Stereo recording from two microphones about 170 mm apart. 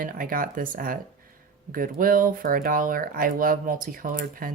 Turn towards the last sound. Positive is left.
turn(degrees=-55)  # may be behind; listen again after turning